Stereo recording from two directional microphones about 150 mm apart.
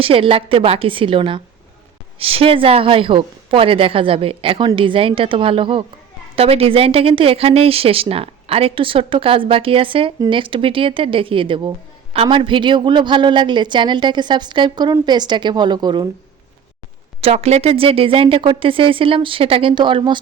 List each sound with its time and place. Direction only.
0.0 s speech: 35° right (ahead or behind)
17.2 s speech: 45° right (ahead or behind)